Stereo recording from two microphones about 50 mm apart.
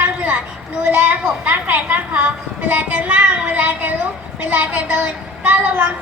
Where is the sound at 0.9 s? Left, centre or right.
Right.